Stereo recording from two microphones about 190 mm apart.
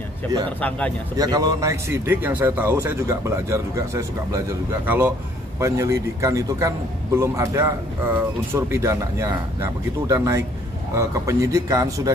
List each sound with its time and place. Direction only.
0.6 s a man's voice: 5° left (ahead or behind)
1.1 s a man's voice: 20° right (ahead or behind)